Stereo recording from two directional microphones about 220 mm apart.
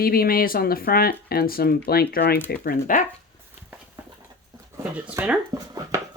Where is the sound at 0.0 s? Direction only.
40° left (ahead or behind).